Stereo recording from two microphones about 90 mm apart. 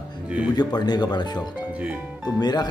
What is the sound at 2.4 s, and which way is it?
Speech, 50° left (ahead or behind).